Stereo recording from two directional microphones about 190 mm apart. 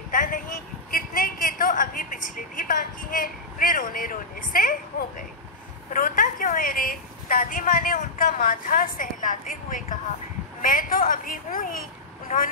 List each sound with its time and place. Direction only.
0.1 s vehicle: 45° left (ahead or behind)
0.9 s a woman's voice: 50° left (ahead or behind)
5.9 s a woman's voice: 45° left (ahead or behind)